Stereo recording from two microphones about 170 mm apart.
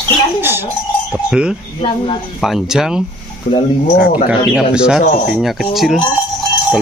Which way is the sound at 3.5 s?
50° left (ahead or behind).